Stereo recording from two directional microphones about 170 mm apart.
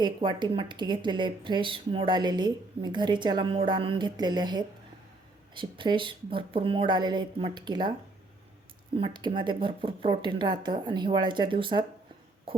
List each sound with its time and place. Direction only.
0.0 s speech: 25° right (ahead or behind)
9.0 s speech: 30° right (ahead or behind)